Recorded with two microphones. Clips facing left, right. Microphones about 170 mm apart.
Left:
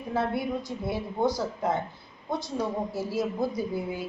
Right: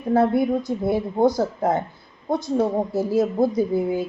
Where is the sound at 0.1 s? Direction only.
50° right (ahead or behind).